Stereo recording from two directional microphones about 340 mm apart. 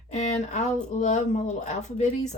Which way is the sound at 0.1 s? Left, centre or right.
Centre.